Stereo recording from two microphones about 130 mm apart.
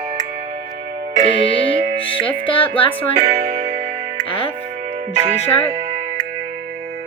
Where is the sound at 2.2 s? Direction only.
40° left (ahead or behind).